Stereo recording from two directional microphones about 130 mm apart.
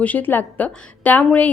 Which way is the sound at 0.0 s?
15° left (ahead or behind).